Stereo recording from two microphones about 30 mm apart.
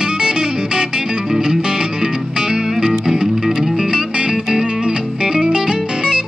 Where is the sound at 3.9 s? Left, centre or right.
Right.